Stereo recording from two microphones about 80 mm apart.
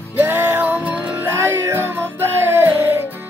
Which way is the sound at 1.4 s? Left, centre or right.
Right.